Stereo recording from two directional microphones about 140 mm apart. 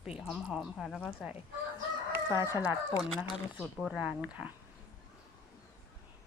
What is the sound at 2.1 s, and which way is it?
Chicken, 20° right (ahead or behind).